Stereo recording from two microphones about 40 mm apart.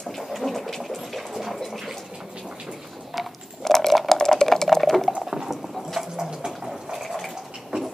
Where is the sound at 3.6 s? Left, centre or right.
Centre.